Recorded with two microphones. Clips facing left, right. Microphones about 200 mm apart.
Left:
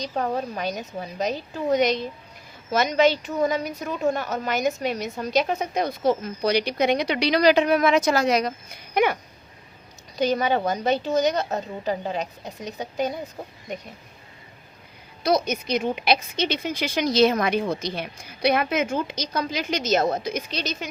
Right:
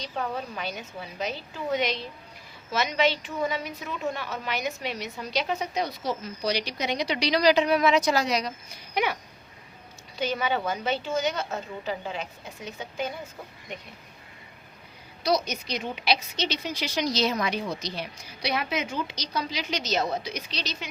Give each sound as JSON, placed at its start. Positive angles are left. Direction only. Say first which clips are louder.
{"t": 0.0, "sound": "a woman's voice", "louder": "left 6 dB", "side_deg": 40}
{"t": 10.2, "sound": "a woman's voice", "louder": "left 6 dB", "side_deg": 40}
{"t": 15.2, "sound": "a woman's voice", "louder": "left 4 dB", "side_deg": 55}